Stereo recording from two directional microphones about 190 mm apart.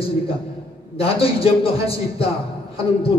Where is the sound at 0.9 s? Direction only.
30° left (ahead or behind).